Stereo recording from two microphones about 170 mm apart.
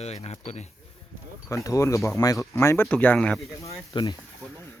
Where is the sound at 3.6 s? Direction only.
20° left (ahead or behind).